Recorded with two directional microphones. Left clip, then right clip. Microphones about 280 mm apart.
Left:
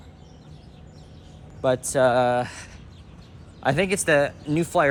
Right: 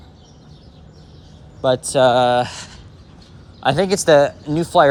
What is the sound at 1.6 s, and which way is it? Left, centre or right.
Speech, centre.